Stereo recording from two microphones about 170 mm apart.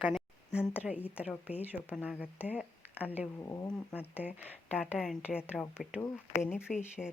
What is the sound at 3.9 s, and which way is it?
Speech, 10° right (ahead or behind).